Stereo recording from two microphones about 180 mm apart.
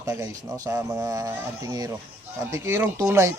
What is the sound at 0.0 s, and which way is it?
Speech, 15° right (ahead or behind).